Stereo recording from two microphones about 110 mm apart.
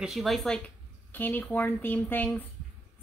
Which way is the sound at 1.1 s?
15° left (ahead or behind).